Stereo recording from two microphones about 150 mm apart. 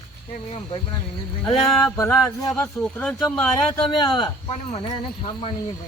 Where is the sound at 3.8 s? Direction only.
30° left (ahead or behind).